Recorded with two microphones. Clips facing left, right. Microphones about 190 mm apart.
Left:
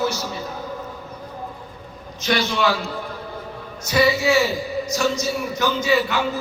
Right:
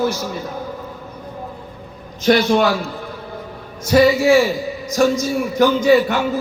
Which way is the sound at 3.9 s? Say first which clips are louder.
Right 6 dB; 50° right (ahead or behind).